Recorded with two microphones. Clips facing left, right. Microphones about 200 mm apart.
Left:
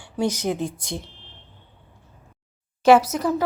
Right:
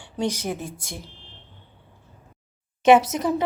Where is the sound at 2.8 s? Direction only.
20° right (ahead or behind).